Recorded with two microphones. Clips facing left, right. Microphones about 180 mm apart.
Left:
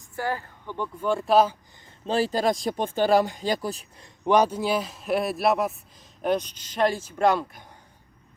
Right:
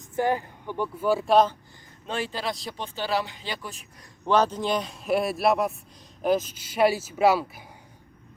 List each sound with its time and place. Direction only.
0.0 s speech: 20° right (ahead or behind); by 1.5 s 5° left (ahead or behind)
2.0 s speech: 35° left (ahead or behind)
4.2 s a man's voice: 15° left (ahead or behind); by 7.6 s 5° right (ahead or behind)